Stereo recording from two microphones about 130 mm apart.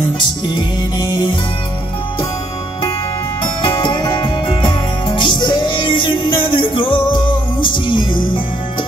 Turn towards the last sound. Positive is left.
turn(degrees=40)  # may be behind; listen again after turning